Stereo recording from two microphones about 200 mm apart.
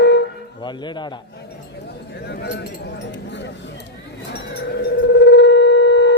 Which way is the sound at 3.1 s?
60° left (ahead or behind).